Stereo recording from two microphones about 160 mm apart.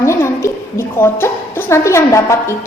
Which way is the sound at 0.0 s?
20° left (ahead or behind).